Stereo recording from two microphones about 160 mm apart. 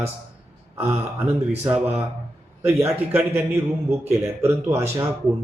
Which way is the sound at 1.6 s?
5° right (ahead or behind).